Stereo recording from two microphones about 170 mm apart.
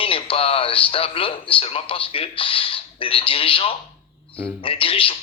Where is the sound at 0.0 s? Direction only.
30° left (ahead or behind).